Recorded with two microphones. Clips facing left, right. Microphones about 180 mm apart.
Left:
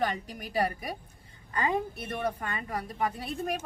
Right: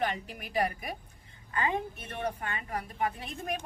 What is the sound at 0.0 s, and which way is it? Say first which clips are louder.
A woman's voice: left 2 dB; 35° left (ahead or behind).